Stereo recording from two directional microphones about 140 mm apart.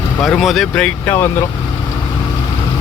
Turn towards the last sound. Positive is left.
turn(degrees=15)  # may be behind; listen again after turning